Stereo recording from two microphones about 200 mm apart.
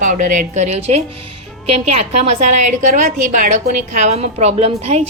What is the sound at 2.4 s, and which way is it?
A woman's voice, 35° right (ahead or behind).